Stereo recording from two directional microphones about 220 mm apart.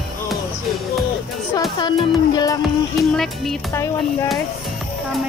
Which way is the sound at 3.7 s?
15° left (ahead or behind).